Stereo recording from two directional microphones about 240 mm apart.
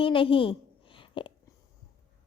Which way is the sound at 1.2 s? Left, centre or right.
Left.